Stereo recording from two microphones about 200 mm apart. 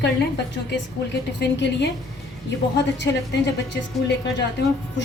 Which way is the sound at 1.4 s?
60° left (ahead or behind).